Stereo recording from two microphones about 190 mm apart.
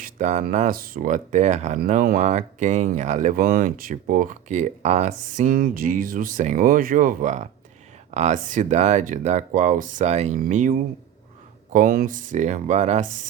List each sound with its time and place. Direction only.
0.0 s speech: 40° right (ahead or behind)
1.8 s speech: 50° right (ahead or behind)